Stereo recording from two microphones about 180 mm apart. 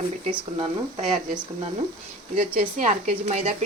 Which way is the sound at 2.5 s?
45° right (ahead or behind).